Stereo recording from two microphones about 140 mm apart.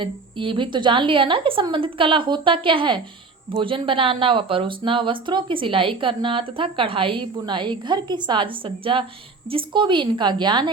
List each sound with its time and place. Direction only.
0.0 s speech: 35° right (ahead or behind)